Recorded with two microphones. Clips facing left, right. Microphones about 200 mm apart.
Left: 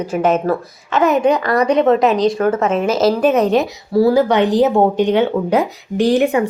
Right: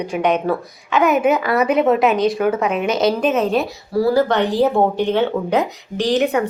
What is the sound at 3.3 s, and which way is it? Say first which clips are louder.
Speech: left 4 dB; 70° left (ahead or behind).